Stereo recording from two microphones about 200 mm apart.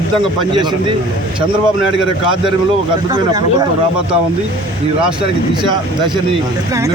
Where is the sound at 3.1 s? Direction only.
20° right (ahead or behind).